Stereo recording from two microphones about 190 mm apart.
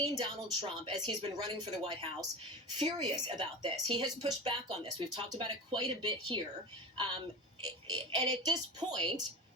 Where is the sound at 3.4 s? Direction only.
25° right (ahead or behind).